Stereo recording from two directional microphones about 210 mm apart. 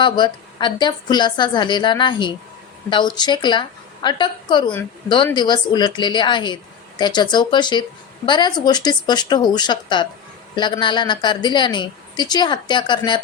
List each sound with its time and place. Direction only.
0.0 s speech: 20° left (ahead or behind)